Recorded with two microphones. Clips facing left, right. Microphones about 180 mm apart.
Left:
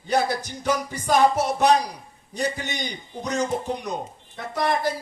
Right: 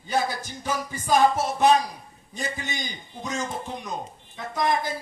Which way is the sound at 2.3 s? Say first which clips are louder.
Left 5 dB; 70° left (ahead or behind).